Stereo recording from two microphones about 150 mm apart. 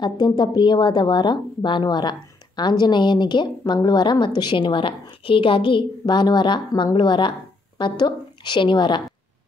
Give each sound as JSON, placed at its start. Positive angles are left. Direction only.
{"t": 0.0, "sound": "a woman's voice", "side_deg": 30}